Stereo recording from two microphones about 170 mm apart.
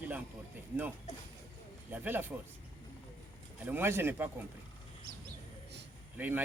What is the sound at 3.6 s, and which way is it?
Speech, 15° right (ahead or behind).